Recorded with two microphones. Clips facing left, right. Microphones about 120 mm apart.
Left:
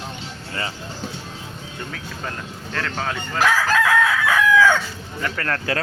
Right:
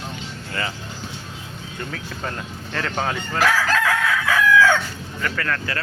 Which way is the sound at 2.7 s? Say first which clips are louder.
Right 2 dB; 5° right (ahead or behind).